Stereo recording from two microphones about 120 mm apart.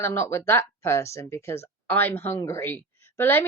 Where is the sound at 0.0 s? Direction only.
20° left (ahead or behind).